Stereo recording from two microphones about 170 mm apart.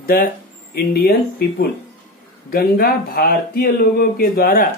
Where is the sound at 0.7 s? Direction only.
65° left (ahead or behind).